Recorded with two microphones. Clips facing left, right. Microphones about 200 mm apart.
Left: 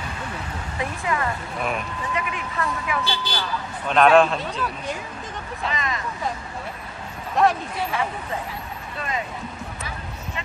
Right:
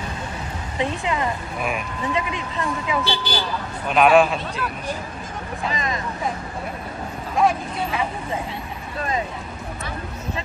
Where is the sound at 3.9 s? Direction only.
10° right (ahead or behind).